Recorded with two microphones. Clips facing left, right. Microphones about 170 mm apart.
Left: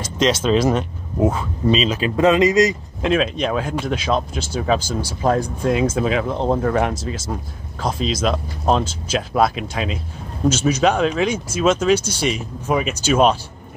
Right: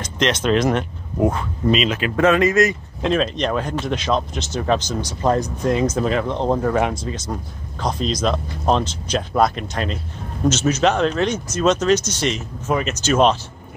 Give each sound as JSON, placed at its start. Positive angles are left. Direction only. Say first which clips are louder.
{"t": 0.0, "sound": "speech", "louder": "left 2 dB", "side_deg": 10}
{"t": 1.8, "sound": "speech", "louder": "left 1 dB", "side_deg": 25}
{"t": 3.0, "sound": "speech", "louder": "left 1 dB", "side_deg": 5}